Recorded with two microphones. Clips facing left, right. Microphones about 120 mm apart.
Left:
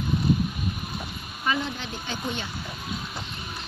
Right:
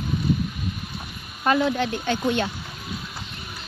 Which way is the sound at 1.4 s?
60° right (ahead or behind).